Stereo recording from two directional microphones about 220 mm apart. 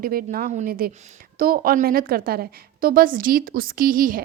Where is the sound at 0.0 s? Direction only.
40° right (ahead or behind).